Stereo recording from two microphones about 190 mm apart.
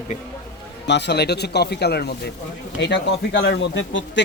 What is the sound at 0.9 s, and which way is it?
A man's voice, 65° left (ahead or behind).